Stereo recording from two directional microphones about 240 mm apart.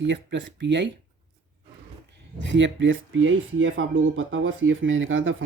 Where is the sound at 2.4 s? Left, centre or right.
Right.